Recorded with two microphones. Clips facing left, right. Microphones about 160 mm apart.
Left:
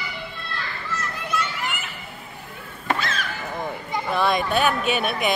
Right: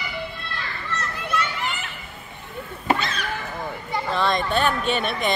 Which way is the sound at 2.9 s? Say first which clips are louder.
Even; 5° left (ahead or behind).